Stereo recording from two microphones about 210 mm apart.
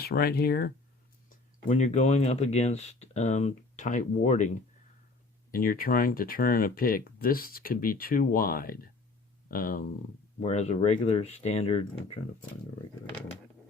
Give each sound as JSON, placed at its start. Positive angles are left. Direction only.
{"t": 0.0, "sound": "speech", "side_deg": 45}
{"t": 1.6, "sound": "speech", "side_deg": 35}